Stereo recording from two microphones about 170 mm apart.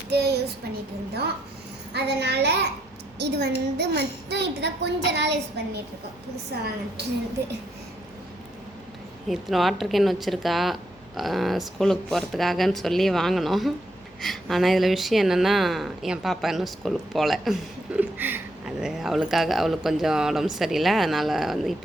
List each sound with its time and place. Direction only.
0.1 s a child's voice: 75° right (ahead or behind)
1.9 s a woman's voice: 80° right
6.5 s a woman's voice: 65° right (ahead or behind)
9.3 s a woman's voice: centre (ahead or behind)